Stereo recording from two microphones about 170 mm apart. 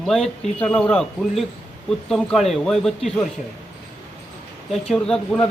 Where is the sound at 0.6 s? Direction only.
5° left (ahead or behind).